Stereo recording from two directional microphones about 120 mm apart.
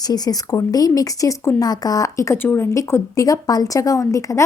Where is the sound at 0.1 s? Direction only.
30° left (ahead or behind).